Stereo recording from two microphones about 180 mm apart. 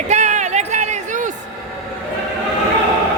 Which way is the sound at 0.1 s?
40° right (ahead or behind).